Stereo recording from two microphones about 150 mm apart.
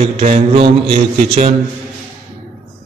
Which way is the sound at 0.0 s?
50° right (ahead or behind).